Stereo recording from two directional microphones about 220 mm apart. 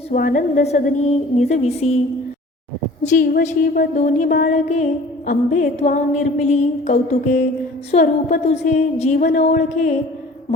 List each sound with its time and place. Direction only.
0.1 s a woman's voice: 40° left (ahead or behind)
3.0 s a woman's voice: 35° left (ahead or behind)